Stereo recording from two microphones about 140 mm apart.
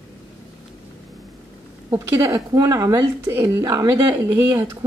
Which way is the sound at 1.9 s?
25° right (ahead or behind).